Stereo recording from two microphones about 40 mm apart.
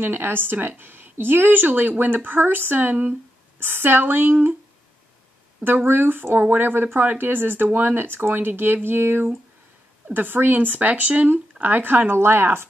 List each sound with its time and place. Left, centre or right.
0.0 s a woman's voice: right
2.9 s speech: right
3.5 s a woman's voice: right
5.9 s a woman's voice: right
11.6 s a woman's voice: right
12.1 s speech: right